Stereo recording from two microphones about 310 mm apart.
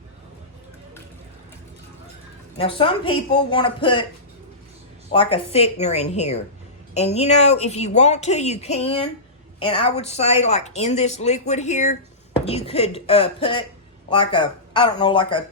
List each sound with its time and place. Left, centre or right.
2.6 s a woman's voice: centre
5.1 s a woman's voice: centre